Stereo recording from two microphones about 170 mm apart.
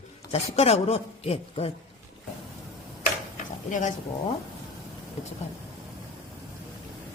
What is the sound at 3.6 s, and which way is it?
Speech, 50° left (ahead or behind).